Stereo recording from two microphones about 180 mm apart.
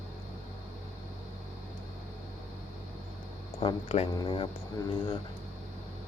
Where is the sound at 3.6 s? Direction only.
30° left (ahead or behind).